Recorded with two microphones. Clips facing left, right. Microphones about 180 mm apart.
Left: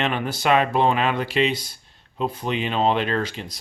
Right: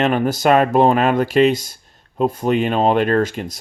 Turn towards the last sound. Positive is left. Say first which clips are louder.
# right 8 dB
turn(degrees=-45)  # may be behind; listen again after turning